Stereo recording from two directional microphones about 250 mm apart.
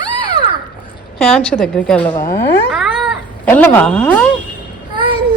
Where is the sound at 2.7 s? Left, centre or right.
Centre.